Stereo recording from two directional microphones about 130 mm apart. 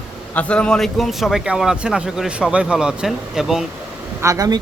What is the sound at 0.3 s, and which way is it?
A man's voice, 10° left (ahead or behind).